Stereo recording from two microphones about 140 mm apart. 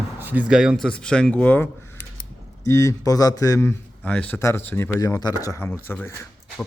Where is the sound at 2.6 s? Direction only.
20° left (ahead or behind).